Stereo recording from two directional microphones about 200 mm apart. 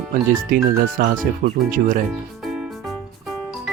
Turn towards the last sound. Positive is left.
turn(degrees=0)  # may be behind; listen again after turning